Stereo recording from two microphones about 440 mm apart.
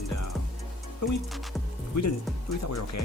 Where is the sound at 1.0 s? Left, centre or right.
Left.